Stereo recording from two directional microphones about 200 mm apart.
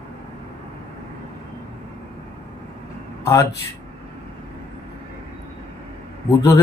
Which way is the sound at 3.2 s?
15° left (ahead or behind).